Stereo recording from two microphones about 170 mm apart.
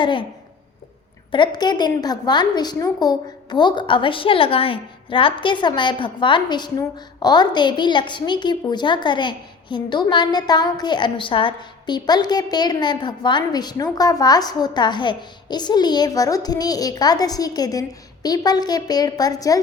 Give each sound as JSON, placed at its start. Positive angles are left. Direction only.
{"t": 0.0, "sound": "a woman's voice", "side_deg": 30}
{"t": 1.3, "sound": "a woman's voice", "side_deg": 25}